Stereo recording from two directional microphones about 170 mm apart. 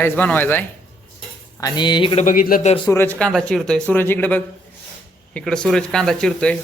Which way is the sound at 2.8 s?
10° left (ahead or behind).